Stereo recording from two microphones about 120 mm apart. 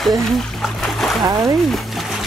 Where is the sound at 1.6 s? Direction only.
Centre (ahead or behind).